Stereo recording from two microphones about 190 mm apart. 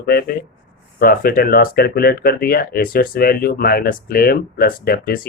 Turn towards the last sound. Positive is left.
turn(degrees=50)  # may be behind; listen again after turning